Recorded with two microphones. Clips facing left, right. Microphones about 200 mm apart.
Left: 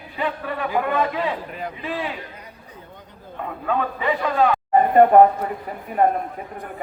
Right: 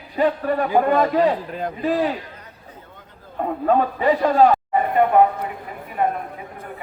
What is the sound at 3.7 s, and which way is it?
Speech, 40° right (ahead or behind).